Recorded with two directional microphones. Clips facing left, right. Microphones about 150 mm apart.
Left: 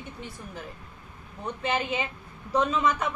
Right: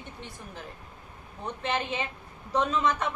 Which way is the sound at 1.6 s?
5° left (ahead or behind).